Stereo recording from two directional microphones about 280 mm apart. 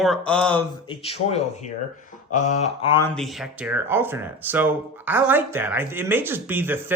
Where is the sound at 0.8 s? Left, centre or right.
Left.